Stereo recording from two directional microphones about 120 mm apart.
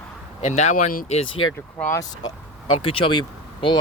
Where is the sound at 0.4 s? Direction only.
75° left (ahead or behind).